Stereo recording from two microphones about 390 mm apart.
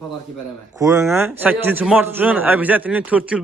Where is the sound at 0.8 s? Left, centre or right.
Centre.